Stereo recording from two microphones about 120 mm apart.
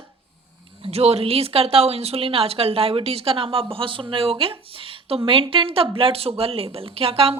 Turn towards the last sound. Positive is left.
turn(degrees=-50)  # may be behind; listen again after turning